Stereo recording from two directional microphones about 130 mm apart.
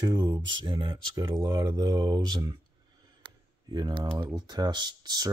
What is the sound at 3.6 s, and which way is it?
Speech, 35° right (ahead or behind).